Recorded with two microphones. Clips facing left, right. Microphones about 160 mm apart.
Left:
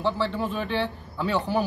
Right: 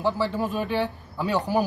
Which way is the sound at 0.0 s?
10° right (ahead or behind).